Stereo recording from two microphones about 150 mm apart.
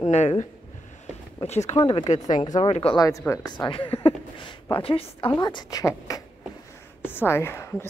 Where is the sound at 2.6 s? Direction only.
40° left (ahead or behind).